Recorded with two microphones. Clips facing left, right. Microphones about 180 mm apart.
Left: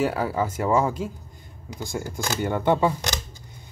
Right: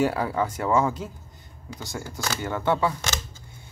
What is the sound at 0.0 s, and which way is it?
Speech, 5° left (ahead or behind).